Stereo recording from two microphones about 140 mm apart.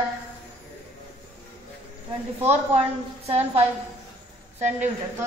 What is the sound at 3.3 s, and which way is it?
Speech, 45° right (ahead or behind).